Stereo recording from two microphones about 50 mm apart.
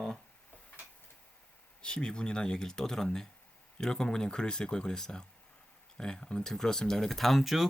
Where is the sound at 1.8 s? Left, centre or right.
Centre.